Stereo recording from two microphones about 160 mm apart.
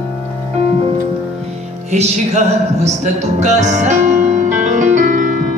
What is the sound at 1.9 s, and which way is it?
Music, 45° right (ahead or behind).